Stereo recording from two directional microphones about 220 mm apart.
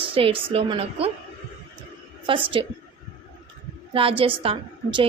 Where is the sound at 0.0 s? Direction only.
25° right (ahead or behind).